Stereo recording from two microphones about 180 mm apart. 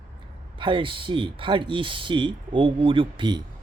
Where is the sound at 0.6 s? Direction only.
30° right (ahead or behind).